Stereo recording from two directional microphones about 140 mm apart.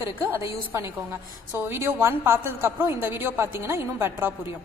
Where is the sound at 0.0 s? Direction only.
20° right (ahead or behind).